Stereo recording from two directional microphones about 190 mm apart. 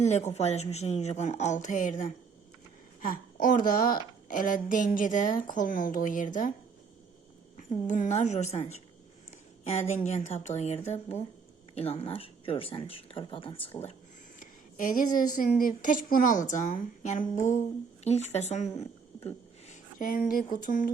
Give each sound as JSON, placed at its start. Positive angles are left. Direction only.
{"t": 0.0, "sound": "a woman's voice", "side_deg": 35}
{"t": 7.5, "sound": "speech", "side_deg": 40}
{"t": 14.3, "sound": "a woman's voice", "side_deg": 45}